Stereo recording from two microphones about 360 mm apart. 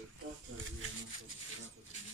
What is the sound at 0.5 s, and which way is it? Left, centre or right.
Rub, right.